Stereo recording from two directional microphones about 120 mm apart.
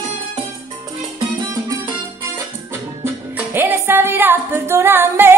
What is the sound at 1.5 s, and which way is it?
Music, 30° right (ahead or behind).